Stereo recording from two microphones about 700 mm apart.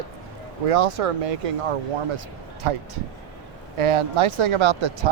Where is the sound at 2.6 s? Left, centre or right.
Right.